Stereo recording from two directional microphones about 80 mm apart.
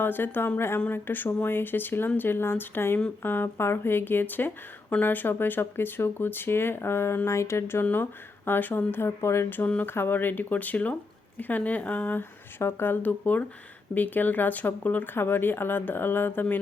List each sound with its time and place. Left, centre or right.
0.0 s speech: left
7.3 s a sound: left
8.4 s speech: left
9.6 s speech: left